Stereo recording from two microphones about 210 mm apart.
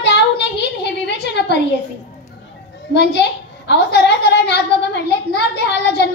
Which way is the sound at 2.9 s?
55° left (ahead or behind).